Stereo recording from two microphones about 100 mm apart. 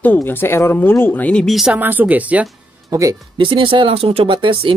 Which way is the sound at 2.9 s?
35° right (ahead or behind).